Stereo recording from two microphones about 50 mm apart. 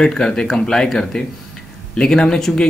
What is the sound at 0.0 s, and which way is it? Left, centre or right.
Speech, centre.